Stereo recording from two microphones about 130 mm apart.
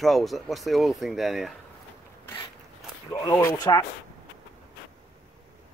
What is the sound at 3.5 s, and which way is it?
Speech, 30° left (ahead or behind).